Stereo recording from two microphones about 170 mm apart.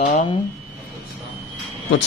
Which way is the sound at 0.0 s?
40° left (ahead or behind).